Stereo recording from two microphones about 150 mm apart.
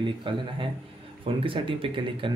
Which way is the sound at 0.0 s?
35° right (ahead or behind).